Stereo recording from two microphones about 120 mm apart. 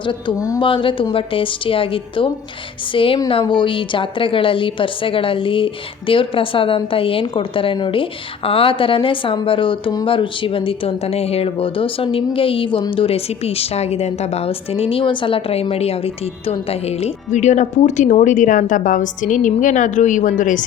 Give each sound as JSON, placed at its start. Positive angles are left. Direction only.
{"t": 0.0, "sound": "a woman's voice", "side_deg": 45}
{"t": 0.3, "sound": "speech", "side_deg": 30}
{"t": 0.6, "sound": "a woman's voice", "side_deg": 45}